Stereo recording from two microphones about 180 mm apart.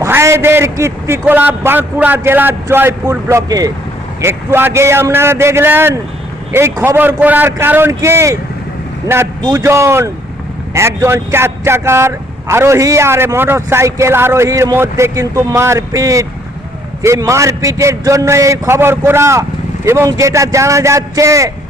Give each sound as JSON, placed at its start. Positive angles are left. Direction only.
{"t": 0.0, "sound": "speech", "side_deg": -15}